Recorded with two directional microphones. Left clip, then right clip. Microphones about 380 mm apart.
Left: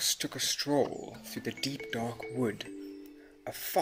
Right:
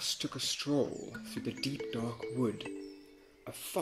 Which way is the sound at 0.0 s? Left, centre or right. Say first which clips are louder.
Left 4 dB; left.